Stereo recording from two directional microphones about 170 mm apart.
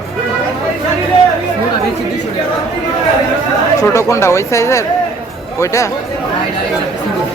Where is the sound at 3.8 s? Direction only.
20° left (ahead or behind).